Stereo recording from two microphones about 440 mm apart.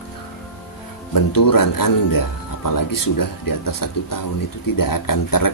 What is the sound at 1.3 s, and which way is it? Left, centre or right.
Speech, left.